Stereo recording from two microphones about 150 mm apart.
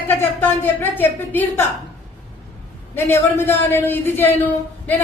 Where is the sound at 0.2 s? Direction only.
15° left (ahead or behind).